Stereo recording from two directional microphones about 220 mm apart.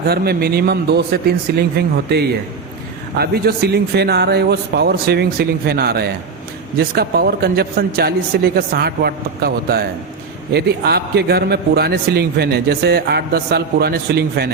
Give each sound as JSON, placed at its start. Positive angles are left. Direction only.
{"t": 0.1, "sound": "a man's voice", "side_deg": -45}